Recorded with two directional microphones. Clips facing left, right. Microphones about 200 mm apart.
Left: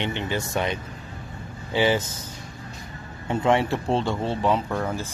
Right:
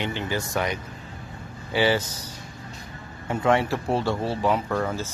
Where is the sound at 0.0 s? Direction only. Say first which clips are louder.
Left 1 dB; 20° left (ahead or behind).